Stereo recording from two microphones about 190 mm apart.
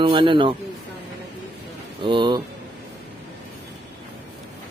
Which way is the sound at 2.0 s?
25° right (ahead or behind).